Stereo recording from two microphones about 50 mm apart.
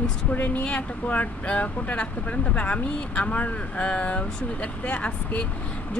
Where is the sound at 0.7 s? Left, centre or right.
Left.